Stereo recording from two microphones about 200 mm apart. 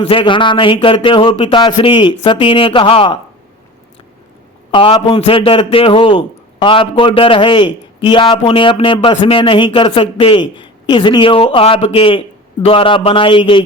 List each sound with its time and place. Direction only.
0.0 s a man's voice: 25° left (ahead or behind)
4.7 s a man's voice: 25° left (ahead or behind)